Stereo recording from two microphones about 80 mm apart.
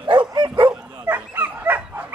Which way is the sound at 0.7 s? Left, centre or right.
Right.